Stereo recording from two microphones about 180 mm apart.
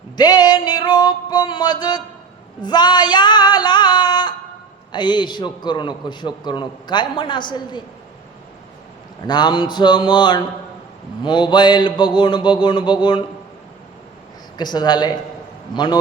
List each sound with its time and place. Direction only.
0.2 s a man's voice: 20° left (ahead or behind)
9.2 s a man's voice: 25° left (ahead or behind)
14.6 s a man's voice: 25° left (ahead or behind)